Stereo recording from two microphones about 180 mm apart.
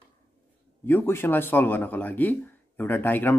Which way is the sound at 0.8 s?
10° left (ahead or behind).